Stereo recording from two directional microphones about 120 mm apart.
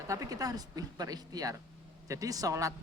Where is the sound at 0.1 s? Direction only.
30° right (ahead or behind).